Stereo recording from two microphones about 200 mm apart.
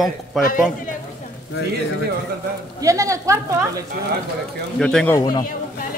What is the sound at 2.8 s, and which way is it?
Speech, 15° right (ahead or behind).